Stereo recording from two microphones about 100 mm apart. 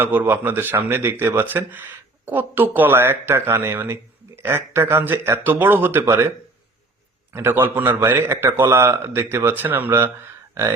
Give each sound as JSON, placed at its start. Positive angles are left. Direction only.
{"t": 0.0, "sound": "speech", "side_deg": -20}
{"t": 7.3, "sound": "speech", "side_deg": -20}